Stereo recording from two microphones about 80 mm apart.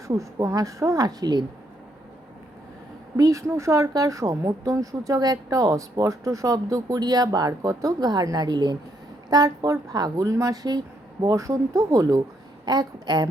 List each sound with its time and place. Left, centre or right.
0.1 s speech: right
3.2 s speech: right
12.6 s a woman's voice: right